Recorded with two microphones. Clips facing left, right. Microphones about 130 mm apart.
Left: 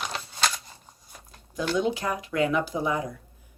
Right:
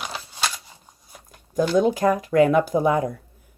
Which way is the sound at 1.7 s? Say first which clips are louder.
Right 8 dB; 45° right (ahead or behind).